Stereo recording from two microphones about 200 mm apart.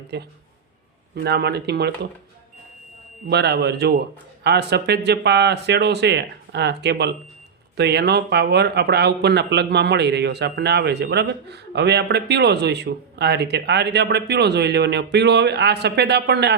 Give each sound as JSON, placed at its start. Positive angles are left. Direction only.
{"t": 0.1, "sound": "speech", "side_deg": -55}
{"t": 3.2, "sound": "speech", "side_deg": -55}